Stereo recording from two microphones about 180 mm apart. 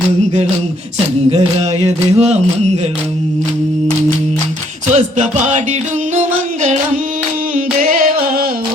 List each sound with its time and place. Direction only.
2.1 s music: 35° right (ahead or behind)
4.9 s music: 40° right (ahead or behind)
7.5 s singing: 50° right (ahead or behind)